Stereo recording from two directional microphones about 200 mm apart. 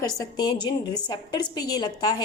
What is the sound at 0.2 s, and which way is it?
A woman's voice, 20° left (ahead or behind).